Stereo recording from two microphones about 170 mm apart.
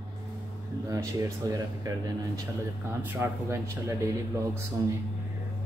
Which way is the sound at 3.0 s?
15° right (ahead or behind).